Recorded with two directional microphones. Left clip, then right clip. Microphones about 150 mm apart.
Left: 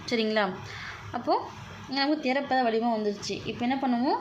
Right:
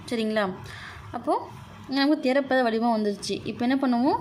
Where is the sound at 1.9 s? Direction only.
40° right (ahead or behind).